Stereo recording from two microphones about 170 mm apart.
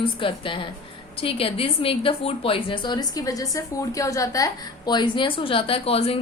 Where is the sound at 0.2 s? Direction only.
30° left (ahead or behind).